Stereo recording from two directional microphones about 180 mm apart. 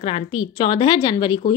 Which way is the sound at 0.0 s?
30° left (ahead or behind).